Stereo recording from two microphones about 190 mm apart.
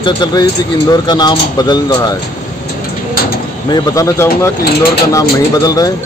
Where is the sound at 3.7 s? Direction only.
20° left (ahead or behind).